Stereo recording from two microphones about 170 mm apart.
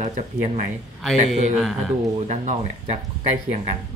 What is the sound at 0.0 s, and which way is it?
Speech, 40° right (ahead or behind).